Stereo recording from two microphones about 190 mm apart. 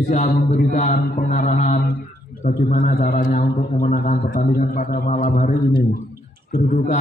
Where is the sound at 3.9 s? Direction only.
50° left (ahead or behind).